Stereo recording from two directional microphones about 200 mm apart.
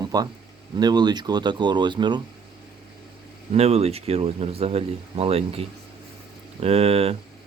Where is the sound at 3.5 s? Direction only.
30° right (ahead or behind).